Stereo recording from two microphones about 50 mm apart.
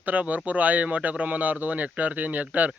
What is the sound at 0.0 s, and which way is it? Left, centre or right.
Speech, right.